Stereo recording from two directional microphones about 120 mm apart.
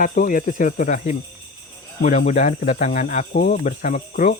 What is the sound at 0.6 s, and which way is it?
Speech, 90° left.